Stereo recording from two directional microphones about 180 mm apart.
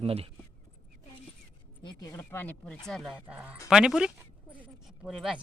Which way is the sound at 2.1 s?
10° left (ahead or behind).